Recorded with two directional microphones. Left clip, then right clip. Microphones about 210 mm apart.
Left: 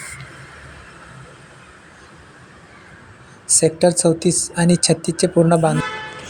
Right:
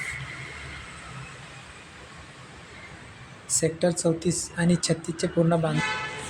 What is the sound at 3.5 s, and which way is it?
Speech, 30° left (ahead or behind).